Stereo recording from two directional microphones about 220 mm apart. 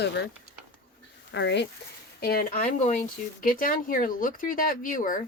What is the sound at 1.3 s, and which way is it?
Speech, 55° left (ahead or behind).